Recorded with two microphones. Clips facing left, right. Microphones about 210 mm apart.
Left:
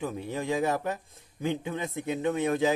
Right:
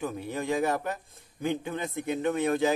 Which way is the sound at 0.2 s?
20° left (ahead or behind).